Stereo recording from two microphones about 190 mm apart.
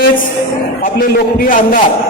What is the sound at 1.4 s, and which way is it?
Speech, 50° left (ahead or behind).